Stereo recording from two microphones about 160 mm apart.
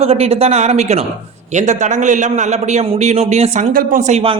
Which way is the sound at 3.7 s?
60° right (ahead or behind).